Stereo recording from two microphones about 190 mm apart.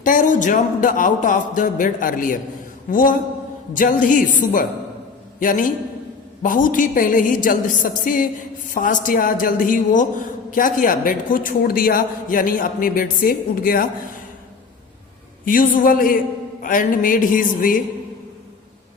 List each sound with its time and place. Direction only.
0.0 s a man's voice: 45° left (ahead or behind)
15.4 s a man's voice: 45° left (ahead or behind)